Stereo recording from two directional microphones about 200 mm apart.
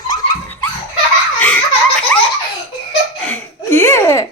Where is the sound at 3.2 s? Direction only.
10° left (ahead or behind).